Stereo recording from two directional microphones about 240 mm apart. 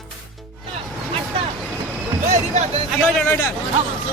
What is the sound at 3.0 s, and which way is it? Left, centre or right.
Speech, centre.